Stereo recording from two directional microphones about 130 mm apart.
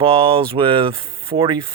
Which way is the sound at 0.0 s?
45° right (ahead or behind).